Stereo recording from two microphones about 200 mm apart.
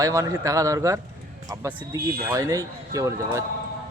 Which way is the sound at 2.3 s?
15° right (ahead or behind).